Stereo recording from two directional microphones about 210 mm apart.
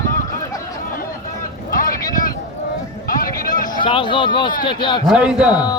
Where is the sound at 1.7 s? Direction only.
40° left (ahead or behind).